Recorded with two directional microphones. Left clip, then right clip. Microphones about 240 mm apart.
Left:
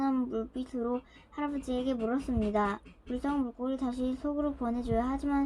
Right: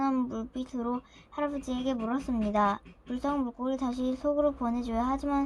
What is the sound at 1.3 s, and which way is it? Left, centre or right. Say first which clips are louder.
A woman's voice: right 2 dB; right.